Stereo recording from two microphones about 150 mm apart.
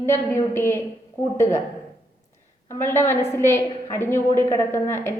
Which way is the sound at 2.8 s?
15° left (ahead or behind).